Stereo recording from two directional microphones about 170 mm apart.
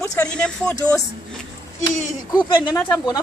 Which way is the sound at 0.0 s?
20° left (ahead or behind).